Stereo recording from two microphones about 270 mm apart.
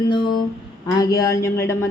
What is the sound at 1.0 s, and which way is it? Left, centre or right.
Speech, centre.